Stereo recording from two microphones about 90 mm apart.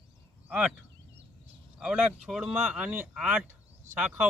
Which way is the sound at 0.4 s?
15° right (ahead or behind).